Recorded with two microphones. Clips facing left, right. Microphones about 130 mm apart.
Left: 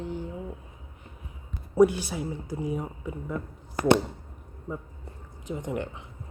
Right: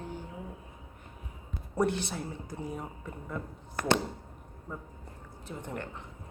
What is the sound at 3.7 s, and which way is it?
Speech, 15° left (ahead or behind).